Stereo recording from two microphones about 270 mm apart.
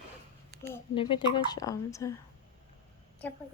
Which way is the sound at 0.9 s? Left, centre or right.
Centre.